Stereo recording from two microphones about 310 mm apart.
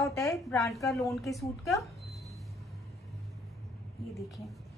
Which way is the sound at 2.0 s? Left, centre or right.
Centre.